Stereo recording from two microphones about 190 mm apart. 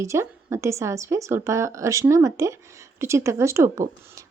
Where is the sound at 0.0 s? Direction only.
15° right (ahead or behind).